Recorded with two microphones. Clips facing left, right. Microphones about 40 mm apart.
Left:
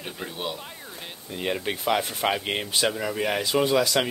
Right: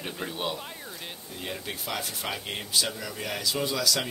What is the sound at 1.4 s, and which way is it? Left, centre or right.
Speech, left.